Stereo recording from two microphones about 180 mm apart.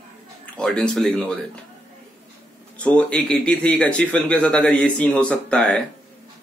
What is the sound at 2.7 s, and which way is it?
Speech, 5° left (ahead or behind).